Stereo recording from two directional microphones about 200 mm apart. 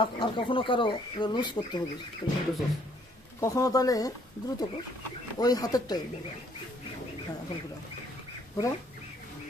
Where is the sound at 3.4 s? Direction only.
15° left (ahead or behind).